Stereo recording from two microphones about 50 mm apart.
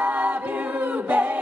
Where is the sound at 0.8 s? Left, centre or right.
Right.